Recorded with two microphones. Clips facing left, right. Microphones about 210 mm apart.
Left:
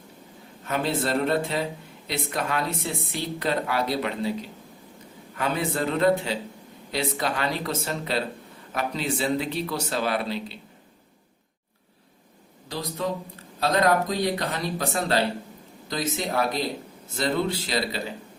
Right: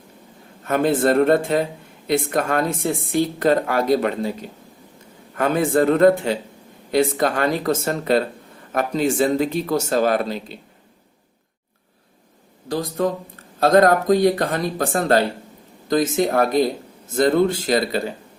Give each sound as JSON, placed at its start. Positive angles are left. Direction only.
{"t": 0.6, "sound": "speech", "side_deg": -50}
{"t": 12.6, "sound": "a man's voice", "side_deg": -50}